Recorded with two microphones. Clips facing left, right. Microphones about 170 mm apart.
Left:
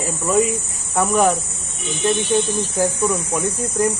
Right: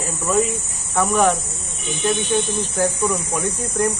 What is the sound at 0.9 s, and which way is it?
Speech, 5° left (ahead or behind).